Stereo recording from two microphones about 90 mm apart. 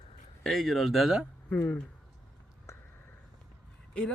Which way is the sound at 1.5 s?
15° left (ahead or behind).